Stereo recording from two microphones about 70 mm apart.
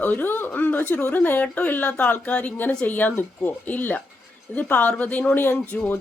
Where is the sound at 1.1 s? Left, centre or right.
Left.